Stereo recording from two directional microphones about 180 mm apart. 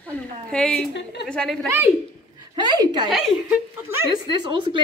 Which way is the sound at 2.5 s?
25° right (ahead or behind).